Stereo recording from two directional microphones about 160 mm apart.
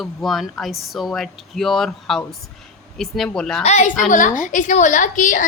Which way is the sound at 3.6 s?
45° left (ahead or behind).